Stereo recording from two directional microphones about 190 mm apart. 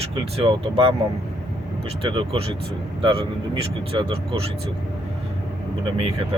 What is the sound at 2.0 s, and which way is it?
Speech, 25° right (ahead or behind).